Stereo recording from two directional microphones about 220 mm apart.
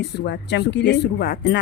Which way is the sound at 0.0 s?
50° left (ahead or behind).